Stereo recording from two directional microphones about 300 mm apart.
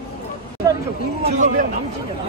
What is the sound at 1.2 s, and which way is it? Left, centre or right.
Speech, right.